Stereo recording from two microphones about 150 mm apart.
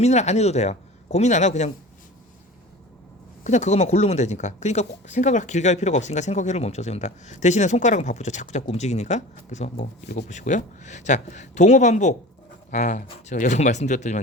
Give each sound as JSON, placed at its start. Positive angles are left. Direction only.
{"t": 0.0, "sound": "speech", "side_deg": 50}
{"t": 3.4, "sound": "speech", "side_deg": 50}